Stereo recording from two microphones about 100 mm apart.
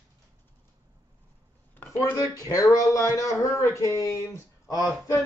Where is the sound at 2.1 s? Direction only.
35° left (ahead or behind).